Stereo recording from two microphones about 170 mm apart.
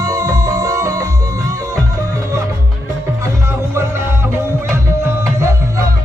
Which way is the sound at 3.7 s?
15° right (ahead or behind).